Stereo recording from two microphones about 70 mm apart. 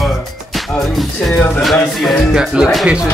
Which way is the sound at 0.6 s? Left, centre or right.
Centre.